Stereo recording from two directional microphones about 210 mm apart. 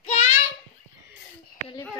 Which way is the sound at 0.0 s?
30° left (ahead or behind).